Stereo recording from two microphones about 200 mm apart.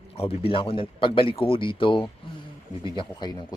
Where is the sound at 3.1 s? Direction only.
20° left (ahead or behind).